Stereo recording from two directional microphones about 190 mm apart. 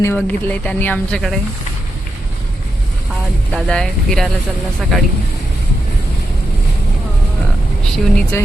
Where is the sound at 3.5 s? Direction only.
5° left (ahead or behind).